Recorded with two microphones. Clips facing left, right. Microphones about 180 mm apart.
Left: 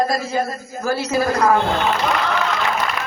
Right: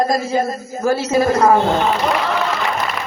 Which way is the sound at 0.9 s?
25° right (ahead or behind).